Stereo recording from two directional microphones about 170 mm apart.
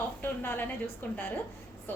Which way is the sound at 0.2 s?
10° left (ahead or behind).